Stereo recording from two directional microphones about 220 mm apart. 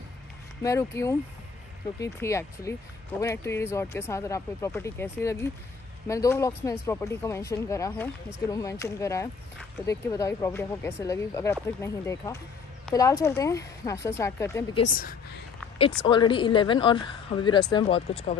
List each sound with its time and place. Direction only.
0.6 s speech: 15° left (ahead or behind)
15.8 s a woman's voice: 20° left (ahead or behind)